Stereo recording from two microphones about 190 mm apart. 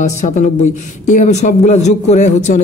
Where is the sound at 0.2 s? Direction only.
35° left (ahead or behind).